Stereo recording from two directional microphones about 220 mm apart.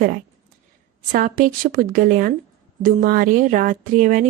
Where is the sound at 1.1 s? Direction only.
40° right (ahead or behind).